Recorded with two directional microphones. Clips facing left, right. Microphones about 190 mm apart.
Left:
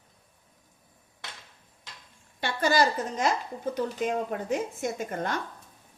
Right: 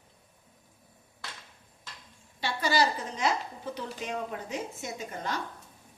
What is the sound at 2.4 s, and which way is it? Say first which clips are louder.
A woman's voice: left 3 dB; 50° left (ahead or behind).